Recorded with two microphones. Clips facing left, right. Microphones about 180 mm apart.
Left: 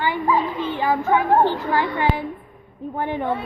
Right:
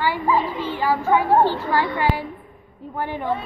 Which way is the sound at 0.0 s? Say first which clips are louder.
Even; 20° left (ahead or behind).